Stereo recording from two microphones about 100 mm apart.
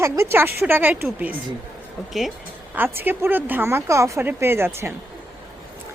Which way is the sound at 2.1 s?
Centre (ahead or behind).